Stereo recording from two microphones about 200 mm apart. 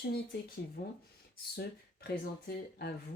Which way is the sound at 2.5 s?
50° left (ahead or behind).